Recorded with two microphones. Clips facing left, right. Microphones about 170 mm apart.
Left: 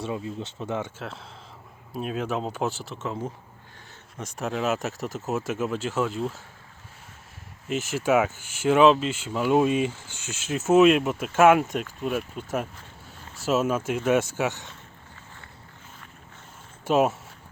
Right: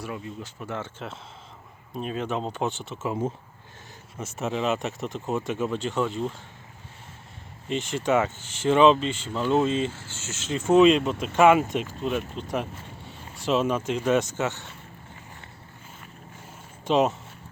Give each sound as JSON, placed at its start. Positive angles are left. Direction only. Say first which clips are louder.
{"t": 0.0, "sound": "speech", "louder": "left 4 dB", "side_deg": 25}
{"t": 0.9, "sound": "speech", "louder": "even", "side_deg": 0}
{"t": 3.1, "sound": "speech", "louder": "right 4 dB", "side_deg": -20}
{"t": 4.2, "sound": "speech", "louder": "right 1 dB", "side_deg": 0}
{"t": 7.7, "sound": "speech", "louder": "left 1 dB", "side_deg": 5}
{"t": 16.8, "sound": "speech", "louder": "even", "side_deg": 5}